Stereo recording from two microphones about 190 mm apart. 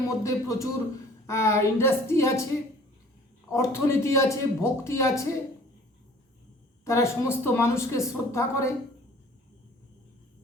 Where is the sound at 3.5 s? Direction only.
15° left (ahead or behind).